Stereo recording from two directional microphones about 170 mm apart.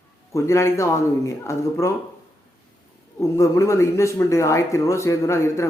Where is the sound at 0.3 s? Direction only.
15° left (ahead or behind).